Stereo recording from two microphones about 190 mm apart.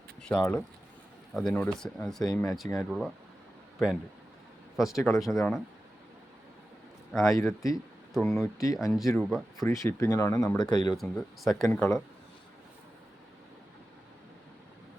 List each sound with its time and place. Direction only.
0.2 s speech: 5° left (ahead or behind)
4.9 s speech: 15° left (ahead or behind)
5.2 s speech: centre (ahead or behind)
7.3 s speech: 15° left (ahead or behind)
8.1 s speech: centre (ahead or behind)
8.4 s speech: 15° left (ahead or behind)
8.9 s speech: centre (ahead or behind)
9.6 s speech: 15° left (ahead or behind)
10.9 s speech: centre (ahead or behind)